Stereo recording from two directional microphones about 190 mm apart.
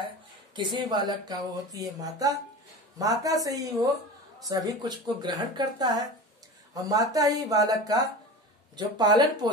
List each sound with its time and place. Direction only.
0.6 s speech: 25° right (ahead or behind)